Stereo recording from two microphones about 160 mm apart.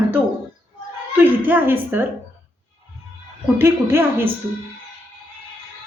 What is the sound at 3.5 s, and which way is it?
Speech, 15° right (ahead or behind).